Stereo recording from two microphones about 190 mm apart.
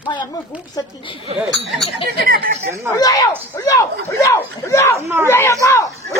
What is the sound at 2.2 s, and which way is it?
Speech, 50° right (ahead or behind).